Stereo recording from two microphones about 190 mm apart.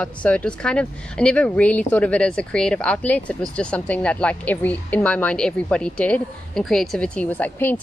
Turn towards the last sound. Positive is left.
turn(degrees=10)  # may be behind; listen again after turning